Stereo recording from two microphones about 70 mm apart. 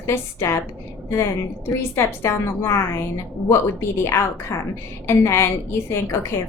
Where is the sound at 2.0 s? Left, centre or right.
Left.